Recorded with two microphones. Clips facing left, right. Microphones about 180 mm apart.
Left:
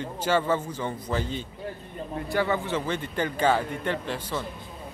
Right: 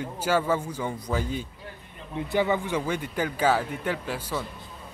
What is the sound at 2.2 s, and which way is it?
Speech, 15° right (ahead or behind).